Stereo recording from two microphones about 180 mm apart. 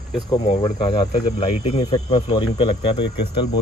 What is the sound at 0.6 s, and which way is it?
Speech, 30° left (ahead or behind).